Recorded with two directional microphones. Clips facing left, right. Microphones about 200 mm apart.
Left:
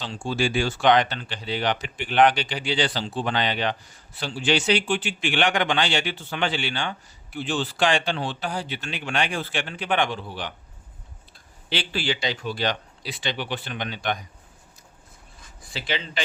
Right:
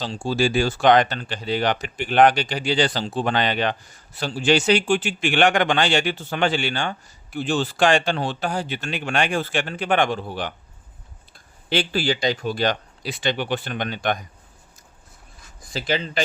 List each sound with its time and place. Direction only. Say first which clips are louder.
0.0 s speech: right 4 dB; 35° right (ahead or behind)
11.7 s speech: right 5 dB; 45° right (ahead or behind)
15.7 s speech: right 5 dB; 45° right (ahead or behind)